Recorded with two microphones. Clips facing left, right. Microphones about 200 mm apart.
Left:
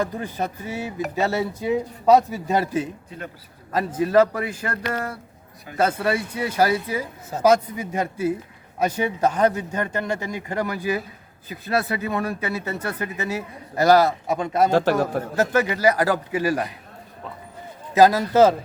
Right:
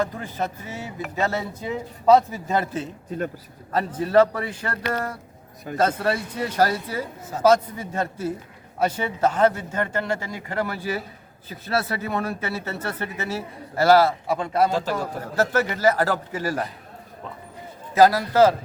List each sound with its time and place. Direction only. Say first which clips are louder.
0.0 s speech: left 1 dB; 15° left (ahead or behind)
3.1 s a man's voice: right 8 dB; 45° right (ahead or behind)
3.7 s speech: left 2 dB; 10° left (ahead or behind)
5.7 s speech: left 1 dB; 10° left (ahead or behind)
14.7 s a man's voice: left 6 dB; 65° left (ahead or behind)
15.4 s speech: left 1 dB; 15° left (ahead or behind)
17.9 s a man's voice: left 1 dB; 20° left (ahead or behind)